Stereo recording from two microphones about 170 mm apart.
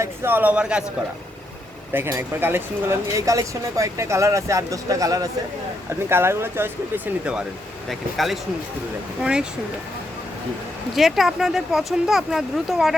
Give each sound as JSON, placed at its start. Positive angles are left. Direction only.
{"t": 0.0, "sound": "speech", "side_deg": -15}
{"t": 1.9, "sound": "speech", "side_deg": -10}
{"t": 10.9, "sound": "speech", "side_deg": 0}